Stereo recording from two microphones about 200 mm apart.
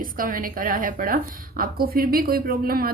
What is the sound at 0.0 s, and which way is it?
A woman's voice, 45° right (ahead or behind).